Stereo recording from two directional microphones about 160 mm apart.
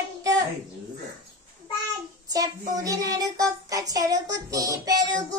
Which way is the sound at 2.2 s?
20° right (ahead or behind).